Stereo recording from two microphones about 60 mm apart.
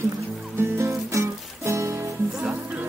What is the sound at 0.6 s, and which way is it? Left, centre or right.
Music, right.